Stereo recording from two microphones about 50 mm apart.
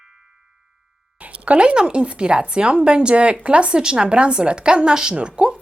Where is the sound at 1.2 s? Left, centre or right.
Right.